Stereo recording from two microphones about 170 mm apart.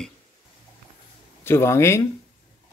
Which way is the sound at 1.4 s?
15° left (ahead or behind).